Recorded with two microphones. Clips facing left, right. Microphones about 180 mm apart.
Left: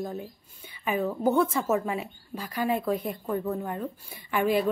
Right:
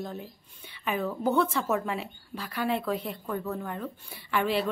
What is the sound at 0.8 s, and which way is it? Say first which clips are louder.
A woman's voice: left 3 dB; 5° left (ahead or behind).